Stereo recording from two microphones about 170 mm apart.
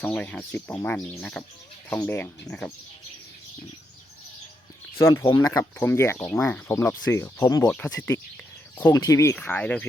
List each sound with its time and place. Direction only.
0.0 s speech: 10° left (ahead or behind)
4.9 s speech: 15° left (ahead or behind)